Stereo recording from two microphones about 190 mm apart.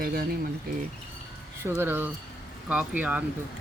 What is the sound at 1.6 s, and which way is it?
Speech, 15° right (ahead or behind).